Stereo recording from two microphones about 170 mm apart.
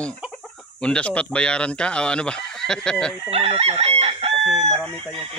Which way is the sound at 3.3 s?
35° right (ahead or behind).